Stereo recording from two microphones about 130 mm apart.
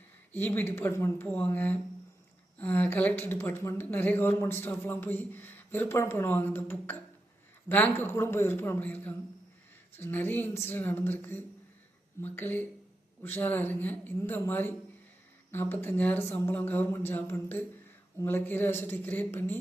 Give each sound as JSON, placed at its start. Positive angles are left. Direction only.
{"t": 0.3, "sound": "speech", "side_deg": 15}